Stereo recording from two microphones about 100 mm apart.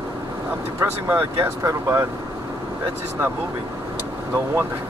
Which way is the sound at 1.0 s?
20° right (ahead or behind).